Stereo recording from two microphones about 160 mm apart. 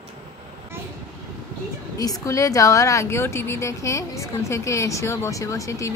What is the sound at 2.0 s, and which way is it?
A woman's voice, 20° left (ahead or behind).